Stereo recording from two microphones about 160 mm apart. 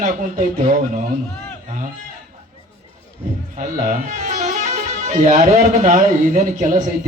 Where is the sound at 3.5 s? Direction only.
55° right (ahead or behind).